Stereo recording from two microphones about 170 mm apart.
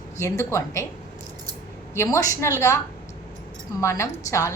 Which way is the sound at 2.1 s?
15° left (ahead or behind).